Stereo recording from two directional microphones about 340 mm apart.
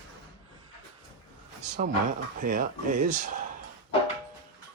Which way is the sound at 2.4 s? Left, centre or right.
Right.